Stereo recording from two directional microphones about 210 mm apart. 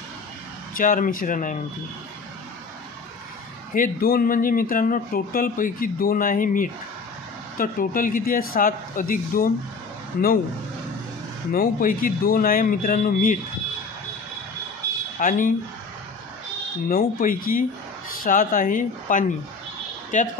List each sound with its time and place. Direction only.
0.7 s speech: 40° left (ahead or behind)
3.7 s speech: 45° left (ahead or behind)
11.5 s speech: 40° left (ahead or behind)
15.1 s speech: 40° left (ahead or behind)
16.9 s speech: 40° left (ahead or behind)